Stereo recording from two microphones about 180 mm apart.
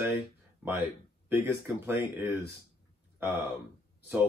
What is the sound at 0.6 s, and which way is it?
Speech, 10° right (ahead or behind).